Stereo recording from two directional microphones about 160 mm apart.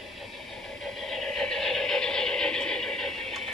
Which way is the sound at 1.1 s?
5° left (ahead or behind).